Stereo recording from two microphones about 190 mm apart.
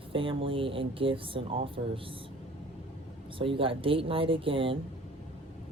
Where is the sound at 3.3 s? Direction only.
30° right (ahead or behind).